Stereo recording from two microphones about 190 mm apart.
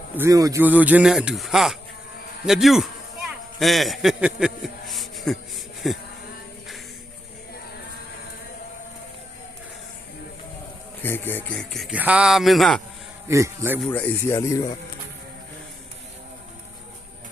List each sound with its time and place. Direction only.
0.2 s speech: 15° right (ahead or behind); by 6.0 s centre (ahead or behind)
11.0 s speech: 10° left (ahead or behind)
13.2 s speech: 15° right (ahead or behind)
13.8 s speech: 10° left (ahead or behind)